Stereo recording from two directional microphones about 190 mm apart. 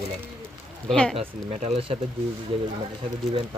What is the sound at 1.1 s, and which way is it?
Speech, 30° right (ahead or behind).